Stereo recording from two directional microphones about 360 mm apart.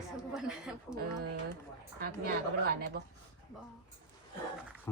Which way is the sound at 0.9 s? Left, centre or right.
Right.